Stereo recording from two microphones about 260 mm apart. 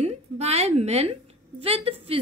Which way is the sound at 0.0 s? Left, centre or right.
Right.